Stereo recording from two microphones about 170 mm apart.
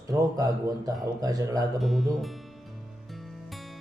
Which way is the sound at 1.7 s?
Centre (ahead or behind).